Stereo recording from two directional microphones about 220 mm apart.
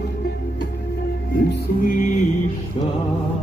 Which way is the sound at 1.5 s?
40° left (ahead or behind).